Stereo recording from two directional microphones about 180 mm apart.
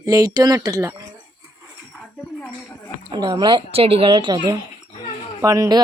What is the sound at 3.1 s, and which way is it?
Speech, 25° right (ahead or behind).